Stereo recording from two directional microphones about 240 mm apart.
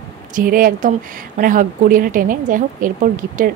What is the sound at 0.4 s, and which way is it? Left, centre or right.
Speech, right.